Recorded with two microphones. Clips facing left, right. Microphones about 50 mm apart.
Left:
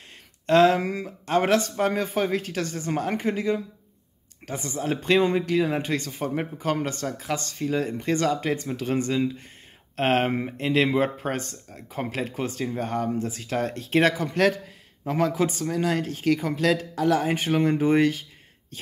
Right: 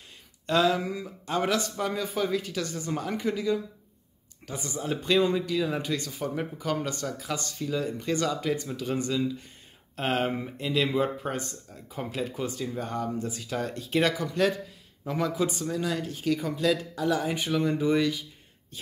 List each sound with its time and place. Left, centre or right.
0.5 s speech: left